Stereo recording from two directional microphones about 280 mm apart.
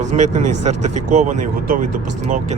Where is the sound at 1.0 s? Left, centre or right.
Right.